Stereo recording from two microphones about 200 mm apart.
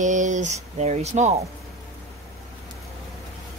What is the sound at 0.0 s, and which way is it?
Speech, 40° right (ahead or behind).